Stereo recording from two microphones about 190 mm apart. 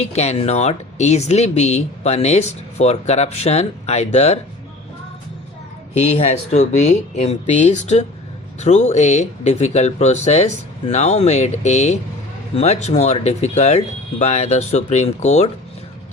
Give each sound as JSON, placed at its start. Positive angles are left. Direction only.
{"t": 0.0, "sound": "speech", "side_deg": 35}
{"t": 5.9, "sound": "speech", "side_deg": 35}